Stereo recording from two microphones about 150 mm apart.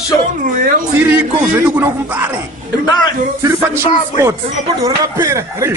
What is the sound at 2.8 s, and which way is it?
Speech, 30° left (ahead or behind).